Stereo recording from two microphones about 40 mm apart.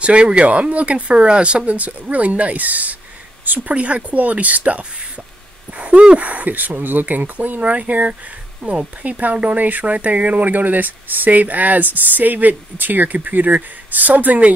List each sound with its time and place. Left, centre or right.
0.0 s speech: right
0.5 s speech: right
1.7 s speech: right
3.7 s speech: right